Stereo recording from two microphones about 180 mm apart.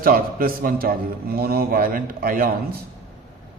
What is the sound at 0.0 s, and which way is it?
A man's voice, 55° right (ahead or behind).